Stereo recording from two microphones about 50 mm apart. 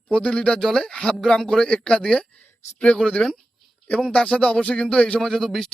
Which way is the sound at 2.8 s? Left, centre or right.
Left.